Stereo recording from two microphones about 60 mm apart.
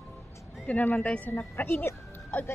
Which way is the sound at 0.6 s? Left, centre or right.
Left.